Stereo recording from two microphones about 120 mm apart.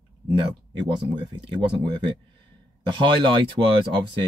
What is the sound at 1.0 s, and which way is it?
Speech, 45° right (ahead or behind).